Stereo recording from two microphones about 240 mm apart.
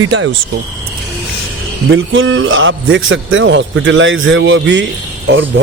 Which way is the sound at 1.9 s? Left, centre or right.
Right.